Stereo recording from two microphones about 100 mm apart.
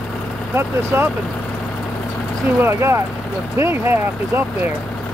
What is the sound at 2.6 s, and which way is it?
Speech, 25° right (ahead or behind).